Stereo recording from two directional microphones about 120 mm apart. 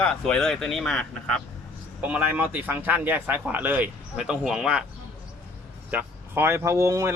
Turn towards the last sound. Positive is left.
turn(degrees=-25)  # may be behind; listen again after turning